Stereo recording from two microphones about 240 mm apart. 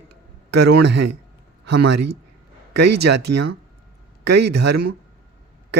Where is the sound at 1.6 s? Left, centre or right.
Right.